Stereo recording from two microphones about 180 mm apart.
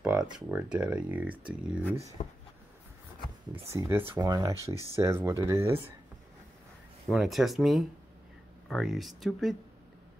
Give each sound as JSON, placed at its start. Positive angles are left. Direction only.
{"t": 0.0, "sound": "a sound", "side_deg": -5}
{"t": 0.5, "sound": "speech", "side_deg": -10}
{"t": 1.9, "sound": "speech", "side_deg": -15}
{"t": 3.7, "sound": "speech", "side_deg": -15}
{"t": 7.1, "sound": "speech", "side_deg": 0}